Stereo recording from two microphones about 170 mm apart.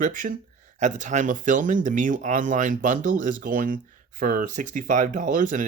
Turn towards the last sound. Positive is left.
turn(degrees=-50)  # may be behind; listen again after turning